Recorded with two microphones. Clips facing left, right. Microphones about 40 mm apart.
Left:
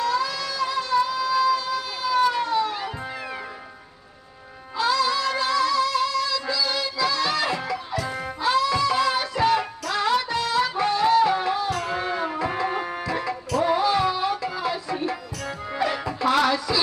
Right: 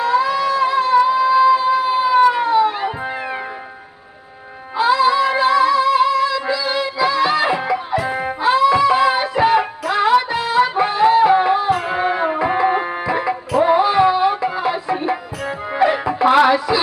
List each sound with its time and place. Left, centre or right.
0.0 s music: right
4.8 s music: right